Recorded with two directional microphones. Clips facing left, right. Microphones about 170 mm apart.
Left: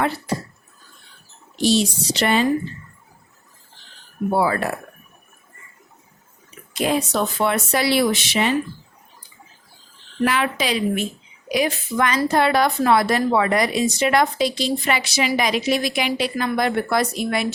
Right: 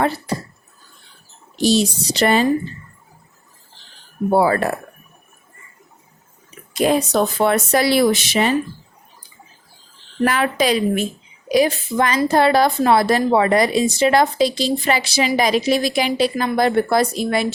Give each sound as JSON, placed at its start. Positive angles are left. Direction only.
{"t": 1.6, "sound": "speech", "side_deg": -40}
{"t": 4.3, "sound": "speech", "side_deg": -40}
{"t": 6.7, "sound": "speech", "side_deg": -45}
{"t": 10.2, "sound": "speech", "side_deg": -45}